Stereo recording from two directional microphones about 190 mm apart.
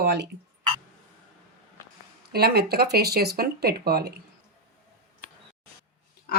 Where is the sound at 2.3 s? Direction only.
55° right (ahead or behind).